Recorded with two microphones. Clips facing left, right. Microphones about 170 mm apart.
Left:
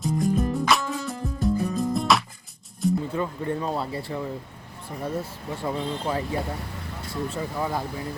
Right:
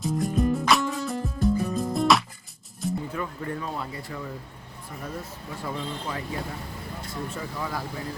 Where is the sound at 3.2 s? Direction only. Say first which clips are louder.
Left 4 dB; 30° left (ahead or behind).